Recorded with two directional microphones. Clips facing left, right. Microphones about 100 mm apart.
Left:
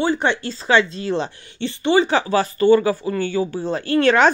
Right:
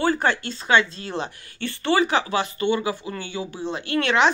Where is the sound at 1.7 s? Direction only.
20° left (ahead or behind).